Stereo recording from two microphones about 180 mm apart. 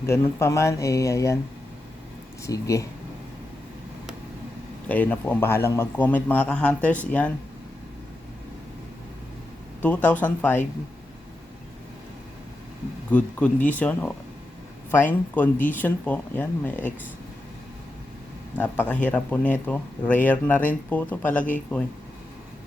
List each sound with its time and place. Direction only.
0.0 s a man's voice: 15° left (ahead or behind)
2.4 s a man's voice: 15° left (ahead or behind)
4.9 s a man's voice: 10° left (ahead or behind)
9.8 s a man's voice: 10° left (ahead or behind)
13.1 s a man's voice: 5° left (ahead or behind)
15.5 s speech: 45° left (ahead or behind)
15.8 s a man's voice: 10° left (ahead or behind)
18.5 s a man's voice: 10° left (ahead or behind)